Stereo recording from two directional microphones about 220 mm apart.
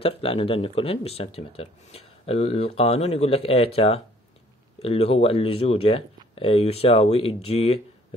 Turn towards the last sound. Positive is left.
turn(degrees=25)  # may be behind; listen again after turning